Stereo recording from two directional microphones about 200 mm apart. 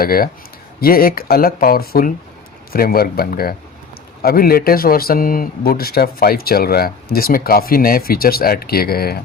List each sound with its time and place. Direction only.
0.0 s speech: 45° left (ahead or behind)